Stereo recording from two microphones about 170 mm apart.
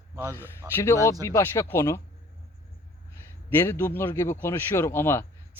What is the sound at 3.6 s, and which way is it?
Speech, 10° left (ahead or behind).